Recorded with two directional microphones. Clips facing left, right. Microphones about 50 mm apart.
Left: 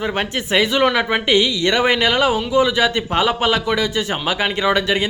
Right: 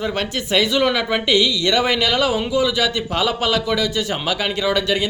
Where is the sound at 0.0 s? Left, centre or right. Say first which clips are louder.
Left 1 dB; left.